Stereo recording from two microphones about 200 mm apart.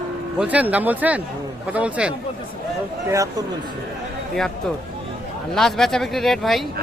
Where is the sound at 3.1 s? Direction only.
15° right (ahead or behind).